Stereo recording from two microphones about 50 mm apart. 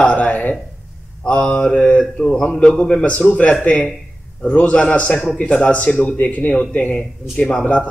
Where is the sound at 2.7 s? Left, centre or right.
Left.